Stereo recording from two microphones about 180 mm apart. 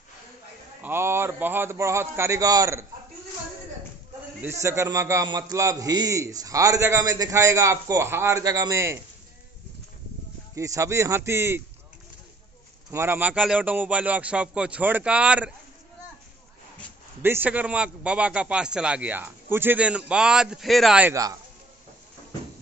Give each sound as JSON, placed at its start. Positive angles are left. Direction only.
{"t": 0.8, "sound": "a man's voice", "side_deg": -15}
{"t": 4.4, "sound": "a man's voice", "side_deg": -15}
{"t": 10.5, "sound": "a man's voice", "side_deg": -15}
{"t": 12.9, "sound": "a man's voice", "side_deg": -10}
{"t": 17.2, "sound": "a man's voice", "side_deg": -10}
{"t": 21.1, "sound": "speech", "side_deg": -20}